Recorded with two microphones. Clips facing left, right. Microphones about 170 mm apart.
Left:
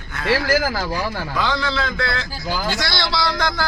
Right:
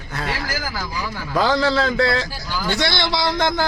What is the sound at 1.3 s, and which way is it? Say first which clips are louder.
A man's voice: right 7 dB; 40° right (ahead or behind).